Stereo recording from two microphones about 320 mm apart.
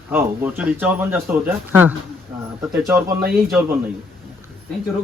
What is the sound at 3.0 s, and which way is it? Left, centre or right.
Speech, right.